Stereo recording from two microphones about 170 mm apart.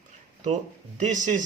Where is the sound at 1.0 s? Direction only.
50° right (ahead or behind).